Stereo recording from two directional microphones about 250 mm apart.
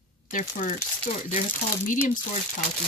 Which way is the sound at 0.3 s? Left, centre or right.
Left.